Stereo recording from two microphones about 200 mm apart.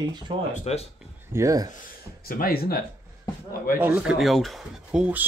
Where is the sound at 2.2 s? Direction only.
45° left (ahead or behind).